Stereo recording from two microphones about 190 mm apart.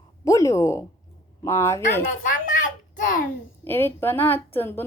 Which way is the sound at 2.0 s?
45° left (ahead or behind).